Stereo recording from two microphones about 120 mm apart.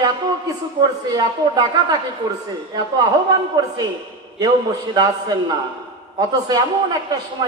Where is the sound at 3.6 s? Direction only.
35° right (ahead or behind).